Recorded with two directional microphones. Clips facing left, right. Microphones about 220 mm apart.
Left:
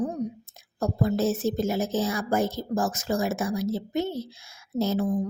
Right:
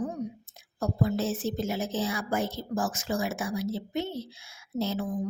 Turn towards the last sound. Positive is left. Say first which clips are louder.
# left 5 dB
turn(degrees=40)  # may be behind; listen again after turning